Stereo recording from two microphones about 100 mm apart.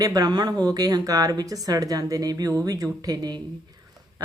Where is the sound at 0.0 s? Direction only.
40° right (ahead or behind).